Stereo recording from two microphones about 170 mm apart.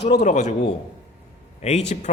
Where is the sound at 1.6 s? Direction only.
40° left (ahead or behind).